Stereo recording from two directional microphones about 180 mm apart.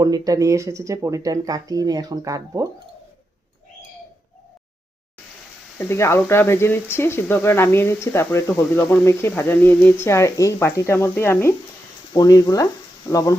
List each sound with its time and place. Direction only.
0.0 s speech: 20° right (ahead or behind)
5.9 s speech: 15° left (ahead or behind)